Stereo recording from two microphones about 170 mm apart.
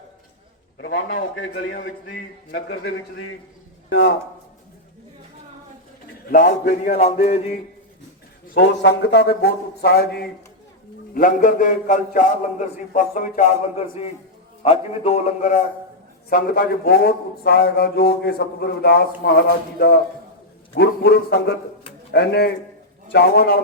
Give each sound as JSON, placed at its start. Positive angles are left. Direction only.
{"t": 0.8, "sound": "a man's voice", "side_deg": 90}
{"t": 1.7, "sound": "a man's voice", "side_deg": 65}
{"t": 6.3, "sound": "a man's voice", "side_deg": 50}
{"t": 6.9, "sound": "a man's voice", "side_deg": 40}
{"t": 8.5, "sound": "a man's voice", "side_deg": 85}
{"t": 11.1, "sound": "a man's voice", "side_deg": 55}
{"t": 16.3, "sound": "a man's voice", "side_deg": 65}